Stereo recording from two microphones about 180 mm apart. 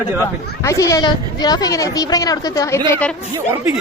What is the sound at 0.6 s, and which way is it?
A woman's voice, 15° left (ahead or behind).